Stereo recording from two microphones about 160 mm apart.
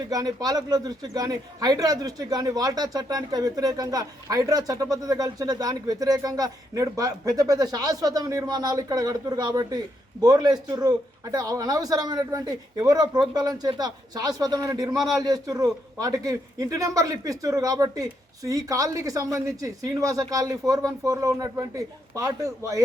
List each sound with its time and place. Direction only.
0.0 s a man's voice: 25° right (ahead or behind)